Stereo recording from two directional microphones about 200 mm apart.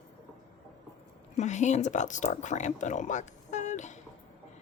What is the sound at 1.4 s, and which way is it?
Speech, 35° left (ahead or behind).